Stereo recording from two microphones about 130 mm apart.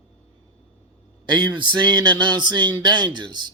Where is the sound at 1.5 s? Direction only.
35° right (ahead or behind).